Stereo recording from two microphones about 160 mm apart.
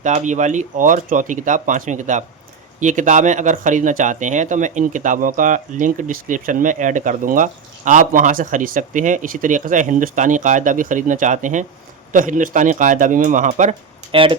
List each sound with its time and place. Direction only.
0.0 s speech: 50° right (ahead or behind)